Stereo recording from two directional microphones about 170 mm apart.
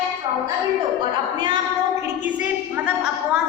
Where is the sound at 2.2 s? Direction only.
10° right (ahead or behind).